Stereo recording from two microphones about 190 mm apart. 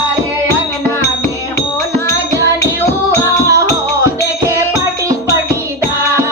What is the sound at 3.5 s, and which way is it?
Music, 15° right (ahead or behind).